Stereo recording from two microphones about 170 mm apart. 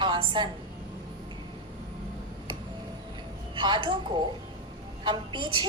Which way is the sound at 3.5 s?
25° right (ahead or behind).